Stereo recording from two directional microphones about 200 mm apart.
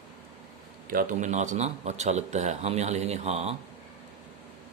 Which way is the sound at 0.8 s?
45° right (ahead or behind).